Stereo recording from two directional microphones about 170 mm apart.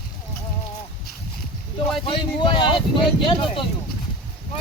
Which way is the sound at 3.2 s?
30° left (ahead or behind).